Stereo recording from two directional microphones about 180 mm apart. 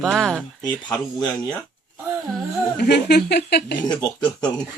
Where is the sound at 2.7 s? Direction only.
65° left (ahead or behind).